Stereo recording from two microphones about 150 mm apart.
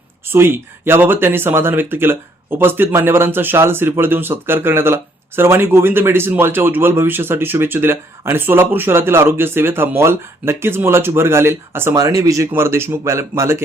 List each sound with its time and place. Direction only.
0.3 s speech: 15° right (ahead or behind)